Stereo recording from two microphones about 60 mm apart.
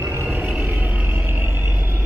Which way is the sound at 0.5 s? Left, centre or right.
Right.